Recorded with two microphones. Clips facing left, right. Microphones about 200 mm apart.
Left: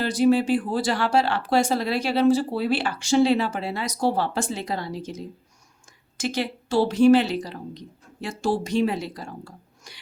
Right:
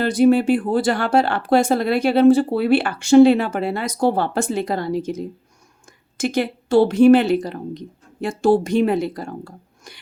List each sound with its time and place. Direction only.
0.0 s speech: 55° right (ahead or behind)